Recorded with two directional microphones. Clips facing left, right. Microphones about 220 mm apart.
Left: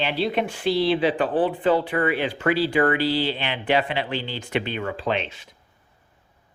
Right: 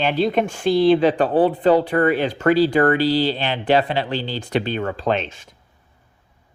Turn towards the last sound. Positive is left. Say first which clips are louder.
# right 4 dB
turn(degrees=-45)  # may be behind; listen again after turning